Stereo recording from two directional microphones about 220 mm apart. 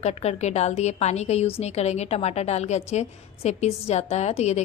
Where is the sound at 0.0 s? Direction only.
30° left (ahead or behind).